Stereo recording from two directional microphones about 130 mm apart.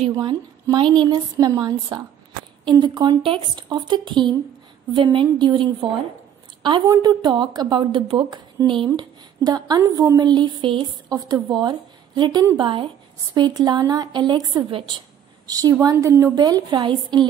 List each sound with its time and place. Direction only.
0.1 s a woman's voice: 35° right (ahead or behind)
6.9 s a woman's voice: 30° right (ahead or behind)
11.1 s a woman's voice: 30° right (ahead or behind)
15.4 s a woman's voice: 30° right (ahead or behind)